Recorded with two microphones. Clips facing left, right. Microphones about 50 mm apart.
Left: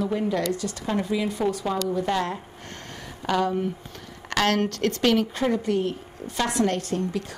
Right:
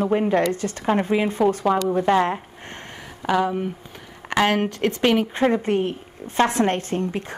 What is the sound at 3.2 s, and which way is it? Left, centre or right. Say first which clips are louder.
Speech: right 2 dB; centre.